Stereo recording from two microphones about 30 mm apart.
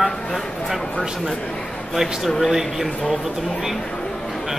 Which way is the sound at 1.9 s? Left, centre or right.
Centre.